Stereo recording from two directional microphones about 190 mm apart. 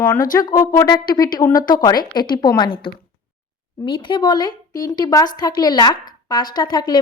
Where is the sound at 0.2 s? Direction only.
20° left (ahead or behind).